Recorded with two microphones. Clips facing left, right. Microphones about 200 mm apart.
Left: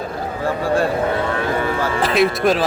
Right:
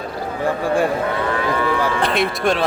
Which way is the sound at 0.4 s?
15° right (ahead or behind).